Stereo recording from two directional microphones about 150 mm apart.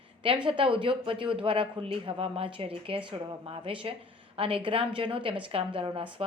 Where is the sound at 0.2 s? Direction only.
35° right (ahead or behind).